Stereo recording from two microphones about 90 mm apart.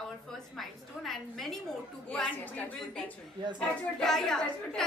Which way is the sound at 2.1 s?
15° left (ahead or behind).